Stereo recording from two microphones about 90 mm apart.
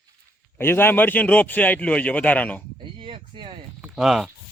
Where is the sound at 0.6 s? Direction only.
25° left (ahead or behind).